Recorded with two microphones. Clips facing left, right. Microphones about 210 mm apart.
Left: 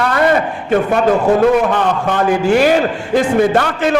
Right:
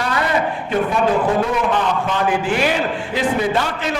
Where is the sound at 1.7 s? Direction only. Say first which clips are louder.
Left 4 dB; 55° left (ahead or behind).